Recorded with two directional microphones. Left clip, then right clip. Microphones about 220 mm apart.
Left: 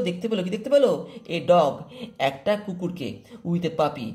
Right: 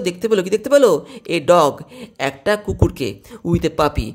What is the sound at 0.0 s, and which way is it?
Speech, 45° right (ahead or behind).